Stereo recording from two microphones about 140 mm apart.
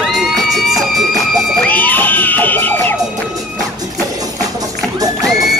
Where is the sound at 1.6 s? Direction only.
10° left (ahead or behind).